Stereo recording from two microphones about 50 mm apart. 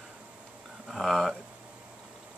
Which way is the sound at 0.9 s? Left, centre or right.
Centre.